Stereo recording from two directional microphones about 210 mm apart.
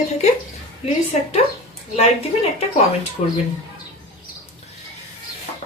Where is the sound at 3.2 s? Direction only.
35° left (ahead or behind).